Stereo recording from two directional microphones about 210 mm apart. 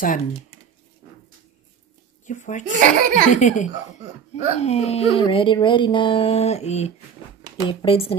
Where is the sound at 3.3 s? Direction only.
35° left (ahead or behind).